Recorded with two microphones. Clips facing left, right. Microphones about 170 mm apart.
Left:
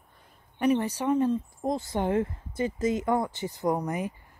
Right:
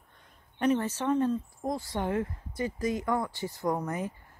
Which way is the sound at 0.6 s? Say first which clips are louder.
Left 2 dB; 10° left (ahead or behind).